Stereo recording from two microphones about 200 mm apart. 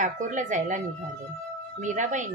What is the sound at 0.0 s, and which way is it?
Speech, 40° right (ahead or behind).